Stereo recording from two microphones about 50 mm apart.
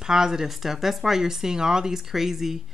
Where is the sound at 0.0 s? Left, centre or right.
Centre.